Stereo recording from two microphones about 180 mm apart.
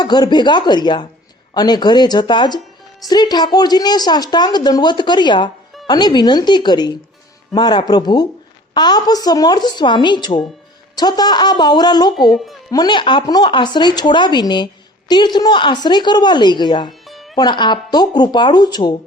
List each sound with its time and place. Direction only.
0.0 s speech: 25° left (ahead or behind)
17.1 s music: centre (ahead or behind)
17.3 s speech: 25° left (ahead or behind)